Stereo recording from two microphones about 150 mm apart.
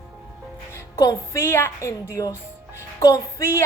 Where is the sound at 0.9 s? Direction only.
20° left (ahead or behind).